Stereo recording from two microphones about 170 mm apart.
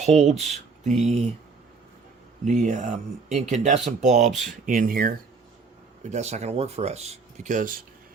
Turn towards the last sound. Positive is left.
turn(degrees=-50)  # may be behind; listen again after turning